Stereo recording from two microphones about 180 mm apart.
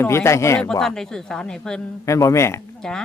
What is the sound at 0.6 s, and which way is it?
Speech, 5° left (ahead or behind).